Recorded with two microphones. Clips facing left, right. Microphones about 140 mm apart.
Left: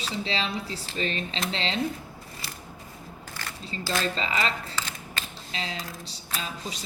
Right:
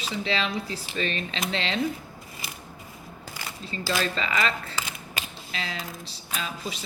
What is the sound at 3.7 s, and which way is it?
A woman's voice, 30° left (ahead or behind).